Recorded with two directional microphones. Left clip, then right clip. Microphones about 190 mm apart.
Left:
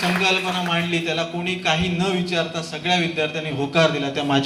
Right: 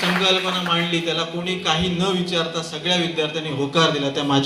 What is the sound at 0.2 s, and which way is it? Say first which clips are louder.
A man's voice: right 1 dB; 60° left (ahead or behind).